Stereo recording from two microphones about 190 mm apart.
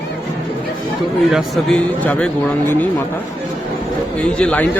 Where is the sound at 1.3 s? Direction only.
Centre (ahead or behind).